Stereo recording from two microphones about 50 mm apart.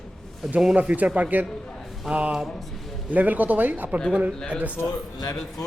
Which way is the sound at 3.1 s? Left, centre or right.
Right.